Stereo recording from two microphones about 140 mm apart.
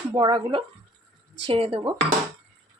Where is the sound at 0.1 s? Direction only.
35° right (ahead or behind).